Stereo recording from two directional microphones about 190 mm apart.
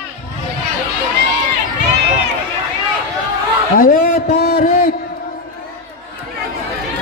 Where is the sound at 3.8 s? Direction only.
50° left (ahead or behind).